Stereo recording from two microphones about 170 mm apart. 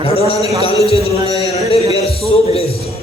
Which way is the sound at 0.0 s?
35° left (ahead or behind).